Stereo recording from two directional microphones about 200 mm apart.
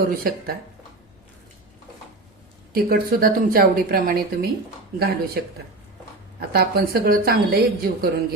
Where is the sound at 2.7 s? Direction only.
50° right (ahead or behind).